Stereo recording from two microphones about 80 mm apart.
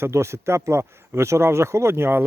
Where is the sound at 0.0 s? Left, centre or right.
Right.